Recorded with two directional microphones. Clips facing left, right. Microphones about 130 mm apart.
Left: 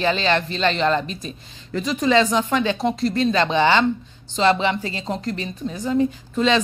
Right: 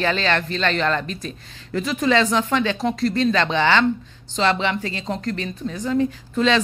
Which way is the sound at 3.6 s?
15° left (ahead or behind).